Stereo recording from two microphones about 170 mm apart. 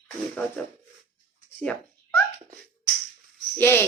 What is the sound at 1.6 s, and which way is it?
Cat, 10° left (ahead or behind).